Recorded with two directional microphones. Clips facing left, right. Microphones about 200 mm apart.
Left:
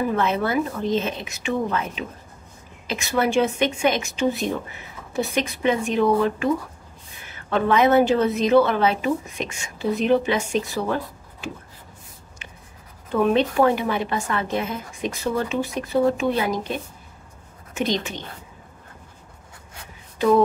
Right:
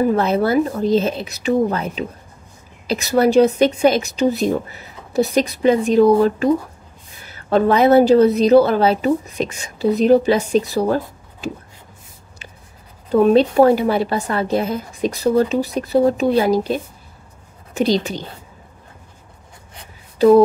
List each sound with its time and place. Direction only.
0.0 s a woman's voice: 35° right (ahead or behind)
13.1 s a woman's voice: 35° right (ahead or behind)
20.2 s a sound: 40° right (ahead or behind)